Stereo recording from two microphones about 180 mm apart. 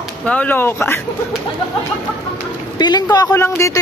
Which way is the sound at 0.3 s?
10° left (ahead or behind).